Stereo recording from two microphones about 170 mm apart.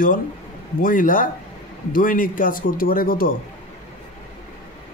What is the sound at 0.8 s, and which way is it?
A man's voice, 55° left (ahead or behind).